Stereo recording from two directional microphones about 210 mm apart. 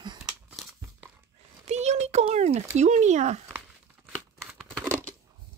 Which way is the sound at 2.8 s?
35° right (ahead or behind).